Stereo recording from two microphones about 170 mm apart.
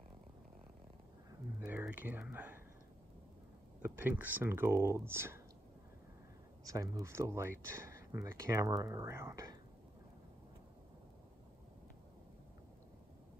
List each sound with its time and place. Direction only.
1.6 s speech: 10° right (ahead or behind)
3.8 s speech: 10° right (ahead or behind)
6.7 s speech: 20° right (ahead or behind)